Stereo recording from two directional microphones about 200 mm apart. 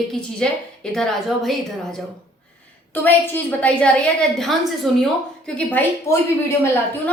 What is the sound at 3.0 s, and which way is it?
A woman's voice, 10° left (ahead or behind).